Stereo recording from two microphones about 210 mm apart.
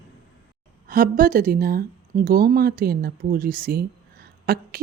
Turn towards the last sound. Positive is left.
turn(degrees=-45)  # may be behind; listen again after turning